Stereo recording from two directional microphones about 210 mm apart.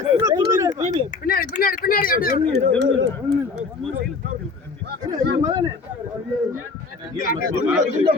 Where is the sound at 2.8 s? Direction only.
50° right (ahead or behind).